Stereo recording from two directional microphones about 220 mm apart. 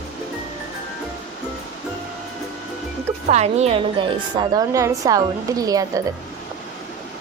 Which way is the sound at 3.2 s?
30° right (ahead or behind).